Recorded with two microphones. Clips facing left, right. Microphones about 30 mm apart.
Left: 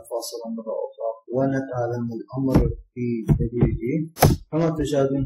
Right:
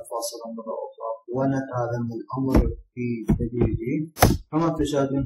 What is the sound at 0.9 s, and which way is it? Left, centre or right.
Speech, centre.